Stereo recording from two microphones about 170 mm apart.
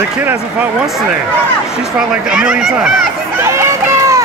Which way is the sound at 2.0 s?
5° right (ahead or behind).